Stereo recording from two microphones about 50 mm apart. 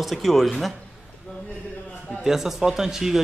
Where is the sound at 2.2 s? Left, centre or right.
Centre.